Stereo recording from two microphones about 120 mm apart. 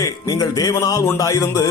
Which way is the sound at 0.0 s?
30° left (ahead or behind).